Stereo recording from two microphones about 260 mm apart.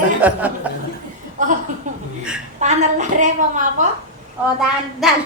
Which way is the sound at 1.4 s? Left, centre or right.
Right.